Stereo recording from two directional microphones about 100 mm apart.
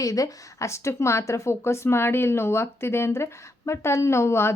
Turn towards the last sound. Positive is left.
turn(degrees=25)  # may be behind; listen again after turning